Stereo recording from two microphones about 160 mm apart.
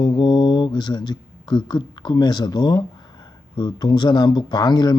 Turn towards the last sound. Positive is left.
turn(degrees=25)  # may be behind; listen again after turning